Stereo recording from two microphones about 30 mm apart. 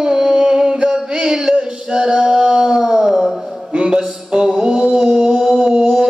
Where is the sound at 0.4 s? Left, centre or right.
Right.